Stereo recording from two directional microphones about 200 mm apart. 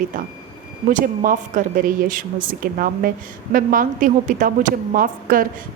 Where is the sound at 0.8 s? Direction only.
40° right (ahead or behind).